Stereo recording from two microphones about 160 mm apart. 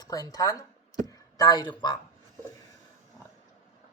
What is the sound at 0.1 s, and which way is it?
A woman's voice, 20° left (ahead or behind).